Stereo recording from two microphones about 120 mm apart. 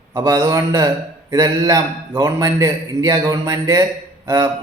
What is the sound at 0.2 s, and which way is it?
A man's voice, 30° right (ahead or behind).